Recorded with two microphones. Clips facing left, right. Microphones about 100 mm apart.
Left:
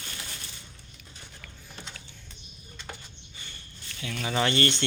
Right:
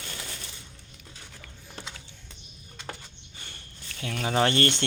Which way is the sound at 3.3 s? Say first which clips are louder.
Right 1 dB; 60° right (ahead or behind).